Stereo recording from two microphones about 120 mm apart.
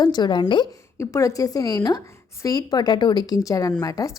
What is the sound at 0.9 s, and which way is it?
A woman's voice, 25° left (ahead or behind).